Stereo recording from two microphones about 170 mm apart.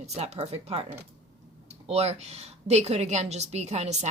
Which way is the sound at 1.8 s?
40° right (ahead or behind).